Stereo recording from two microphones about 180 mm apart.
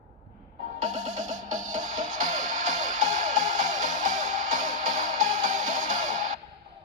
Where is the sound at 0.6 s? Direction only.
45° right (ahead or behind).